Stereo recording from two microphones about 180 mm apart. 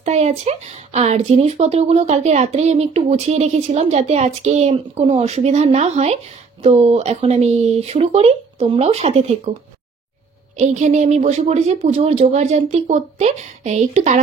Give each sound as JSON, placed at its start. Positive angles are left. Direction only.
{"t": 0.0, "sound": "a woman's voice", "side_deg": -40}
{"t": 10.6, "sound": "a woman's voice", "side_deg": -40}